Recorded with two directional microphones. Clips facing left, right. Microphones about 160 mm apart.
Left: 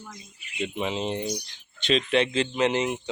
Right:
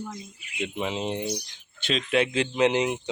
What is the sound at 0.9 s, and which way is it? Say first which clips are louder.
Speech: even; 10° right (ahead or behind).